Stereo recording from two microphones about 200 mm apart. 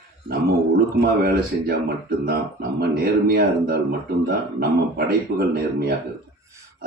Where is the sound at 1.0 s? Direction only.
50° right (ahead or behind).